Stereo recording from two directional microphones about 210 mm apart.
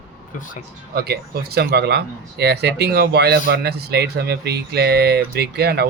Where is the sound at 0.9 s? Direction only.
50° right (ahead or behind).